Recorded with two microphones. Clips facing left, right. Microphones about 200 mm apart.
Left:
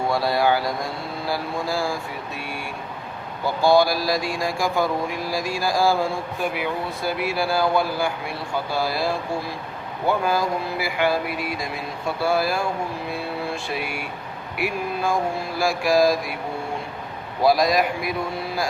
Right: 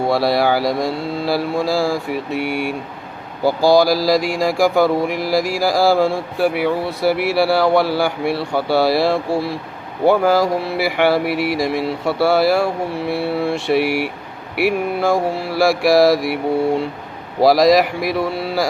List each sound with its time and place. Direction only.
0.1 s mantra: 80° right
3.7 s mantra: 90° right; by 9.6 s 75° right (ahead or behind)
10.1 s mantra: 85° right
17.4 s mantra: 90° right